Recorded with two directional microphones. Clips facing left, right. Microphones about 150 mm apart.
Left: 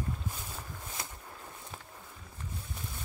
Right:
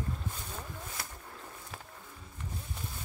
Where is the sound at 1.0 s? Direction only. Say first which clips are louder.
Left 1 dB; 20° left (ahead or behind).